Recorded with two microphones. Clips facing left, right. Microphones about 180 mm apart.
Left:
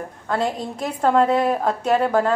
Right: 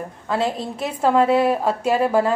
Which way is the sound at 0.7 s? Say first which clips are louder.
Even; 5° right (ahead or behind).